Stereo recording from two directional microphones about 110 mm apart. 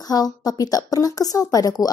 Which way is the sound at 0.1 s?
35° left (ahead or behind).